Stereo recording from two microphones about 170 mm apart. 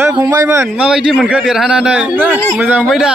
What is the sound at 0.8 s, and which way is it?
A man's voice, 5° right (ahead or behind).